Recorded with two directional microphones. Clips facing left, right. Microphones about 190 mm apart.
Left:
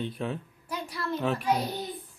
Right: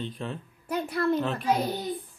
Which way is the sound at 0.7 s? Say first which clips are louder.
Right 8 dB; 55° right (ahead or behind).